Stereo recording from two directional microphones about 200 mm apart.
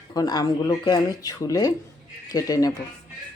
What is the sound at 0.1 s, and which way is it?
Speech, 20° left (ahead or behind).